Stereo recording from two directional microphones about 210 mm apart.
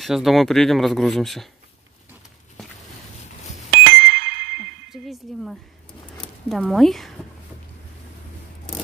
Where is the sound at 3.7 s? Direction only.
55° right (ahead or behind).